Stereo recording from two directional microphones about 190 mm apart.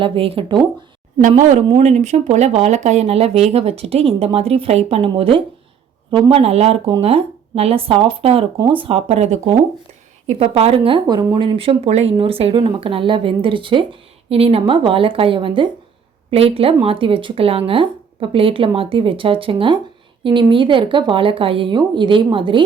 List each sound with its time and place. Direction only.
0.0 s speech: 30° right (ahead or behind)
1.3 s speech: 40° right (ahead or behind)